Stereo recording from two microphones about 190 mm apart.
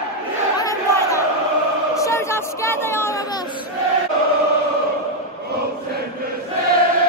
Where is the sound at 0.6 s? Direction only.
15° left (ahead or behind).